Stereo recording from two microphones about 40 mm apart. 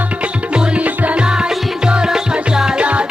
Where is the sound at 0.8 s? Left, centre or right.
Right.